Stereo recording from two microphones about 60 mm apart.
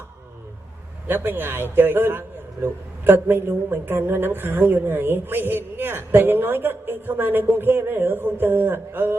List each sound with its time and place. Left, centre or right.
1.0 s a woman's voice: right